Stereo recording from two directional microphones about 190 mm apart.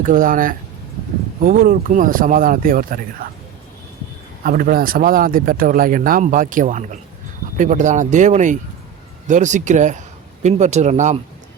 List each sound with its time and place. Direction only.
0.0 s speech: 45° right (ahead or behind)
4.4 s speech: 50° right (ahead or behind)